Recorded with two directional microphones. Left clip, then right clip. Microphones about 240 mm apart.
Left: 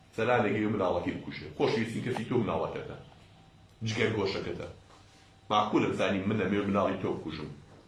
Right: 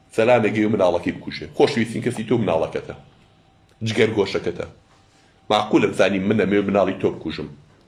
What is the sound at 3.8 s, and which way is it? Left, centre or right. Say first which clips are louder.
Speech: right 11 dB; right.